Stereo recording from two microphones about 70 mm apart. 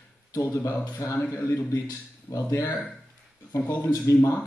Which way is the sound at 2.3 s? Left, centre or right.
Left.